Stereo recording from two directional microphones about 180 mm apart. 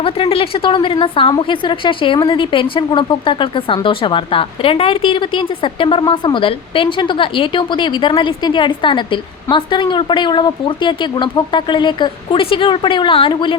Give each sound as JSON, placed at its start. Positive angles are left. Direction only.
{"t": 0.0, "sound": "a woman's voice", "side_deg": 30}